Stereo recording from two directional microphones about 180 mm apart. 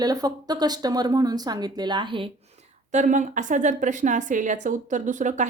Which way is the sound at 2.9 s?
45° right (ahead or behind).